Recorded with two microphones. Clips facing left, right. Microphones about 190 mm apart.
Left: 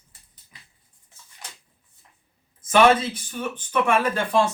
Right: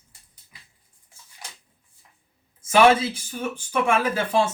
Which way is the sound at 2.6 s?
10° right (ahead or behind).